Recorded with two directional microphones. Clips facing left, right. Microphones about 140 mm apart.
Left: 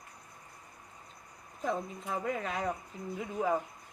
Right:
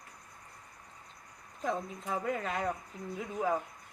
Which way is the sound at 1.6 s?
Centre (ahead or behind).